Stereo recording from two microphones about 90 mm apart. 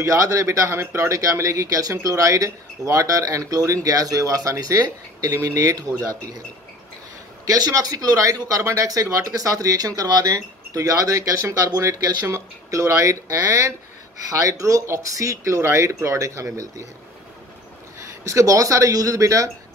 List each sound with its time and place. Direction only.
0.0 s speech: 35° right (ahead or behind)
7.4 s speech: 40° right (ahead or behind)
17.9 s speech: 35° right (ahead or behind)